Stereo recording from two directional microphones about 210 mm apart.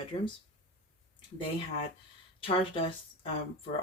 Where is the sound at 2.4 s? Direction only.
25° left (ahead or behind).